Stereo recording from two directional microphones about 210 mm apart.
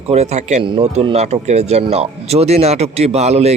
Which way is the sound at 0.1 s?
30° right (ahead or behind).